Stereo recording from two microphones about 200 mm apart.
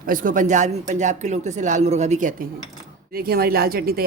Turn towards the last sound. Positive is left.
turn(degrees=-50)  # may be behind; listen again after turning